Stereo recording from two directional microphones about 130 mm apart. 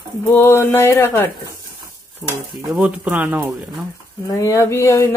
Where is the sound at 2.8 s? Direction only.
10° right (ahead or behind).